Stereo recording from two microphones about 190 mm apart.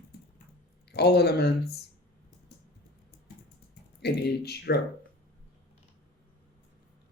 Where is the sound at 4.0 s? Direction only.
60° left (ahead or behind).